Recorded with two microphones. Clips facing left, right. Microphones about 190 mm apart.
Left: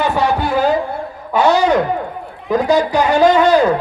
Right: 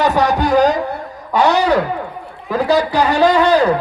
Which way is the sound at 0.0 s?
40° right (ahead or behind).